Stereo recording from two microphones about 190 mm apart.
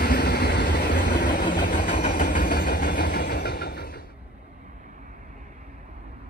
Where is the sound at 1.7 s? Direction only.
45° left (ahead or behind).